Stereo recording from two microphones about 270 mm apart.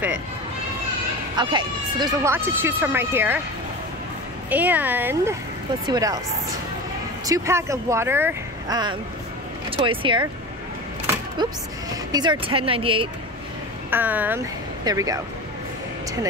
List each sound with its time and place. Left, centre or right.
1.3 s speech: centre
4.5 s speech: centre
7.2 s speech: centre
12.1 s speech: centre
13.8 s speech: centre